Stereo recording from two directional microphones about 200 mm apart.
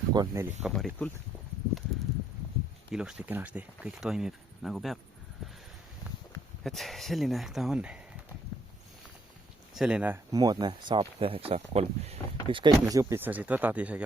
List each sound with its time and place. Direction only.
0.1 s speech: 15° right (ahead or behind)
0.6 s speech: centre (ahead or behind)
2.9 s speech: 5° right (ahead or behind)
6.6 s speech: centre (ahead or behind)
9.7 s speech: 5° right (ahead or behind)
10.3 s speech: 20° right (ahead or behind)